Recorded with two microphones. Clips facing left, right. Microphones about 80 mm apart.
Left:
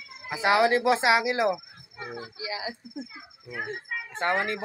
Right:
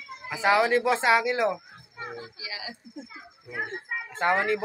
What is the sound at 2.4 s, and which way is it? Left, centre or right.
Speech, left.